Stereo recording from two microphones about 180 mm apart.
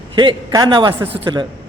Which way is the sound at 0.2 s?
25° right (ahead or behind).